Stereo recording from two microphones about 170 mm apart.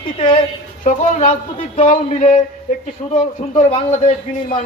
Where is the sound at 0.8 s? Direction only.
45° left (ahead or behind).